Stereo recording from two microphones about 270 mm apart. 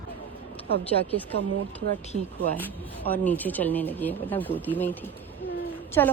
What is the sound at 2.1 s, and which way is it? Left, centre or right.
Speech, right.